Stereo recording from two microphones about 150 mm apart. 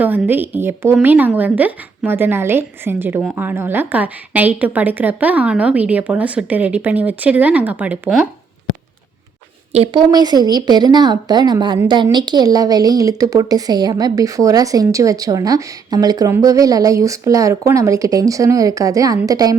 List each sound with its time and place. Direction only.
0.0 s a woman's voice: 10° right (ahead or behind)
9.7 s a woman's voice: 35° right (ahead or behind)